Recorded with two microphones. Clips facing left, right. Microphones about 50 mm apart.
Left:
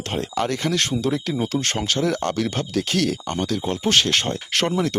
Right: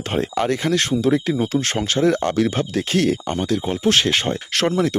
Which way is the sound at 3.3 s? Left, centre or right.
Centre.